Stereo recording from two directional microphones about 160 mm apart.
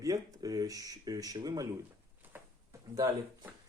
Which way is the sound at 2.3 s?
20° right (ahead or behind).